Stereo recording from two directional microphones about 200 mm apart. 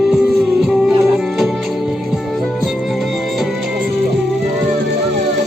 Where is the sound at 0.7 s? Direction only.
Centre (ahead or behind).